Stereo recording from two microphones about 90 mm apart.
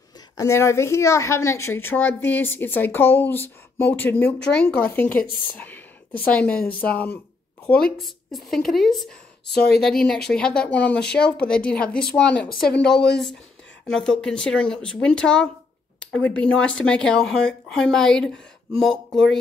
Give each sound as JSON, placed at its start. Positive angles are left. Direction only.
{"t": 0.4, "sound": "a woman's voice", "side_deg": 30}
{"t": 8.0, "sound": "speech", "side_deg": 0}